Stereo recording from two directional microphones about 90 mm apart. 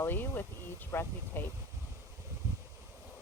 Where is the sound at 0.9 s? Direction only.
25° left (ahead or behind).